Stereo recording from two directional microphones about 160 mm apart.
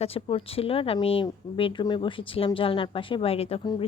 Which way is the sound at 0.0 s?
35° left (ahead or behind).